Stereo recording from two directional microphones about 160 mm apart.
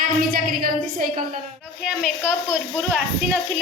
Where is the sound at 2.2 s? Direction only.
15° left (ahead or behind).